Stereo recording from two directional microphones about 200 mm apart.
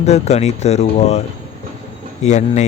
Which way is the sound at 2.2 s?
35° left (ahead or behind).